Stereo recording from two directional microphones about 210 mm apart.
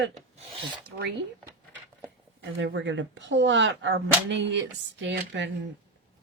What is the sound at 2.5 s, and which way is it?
Speech, 60° right (ahead or behind).